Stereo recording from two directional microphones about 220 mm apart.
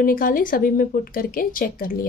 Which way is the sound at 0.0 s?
40° left (ahead or behind).